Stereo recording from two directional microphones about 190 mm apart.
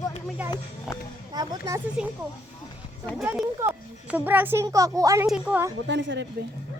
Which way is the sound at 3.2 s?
10° right (ahead or behind).